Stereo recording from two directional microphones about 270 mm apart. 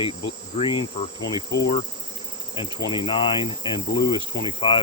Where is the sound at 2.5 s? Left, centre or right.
Centre.